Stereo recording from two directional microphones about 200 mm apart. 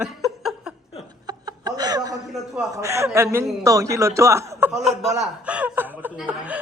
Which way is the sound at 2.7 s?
15° right (ahead or behind).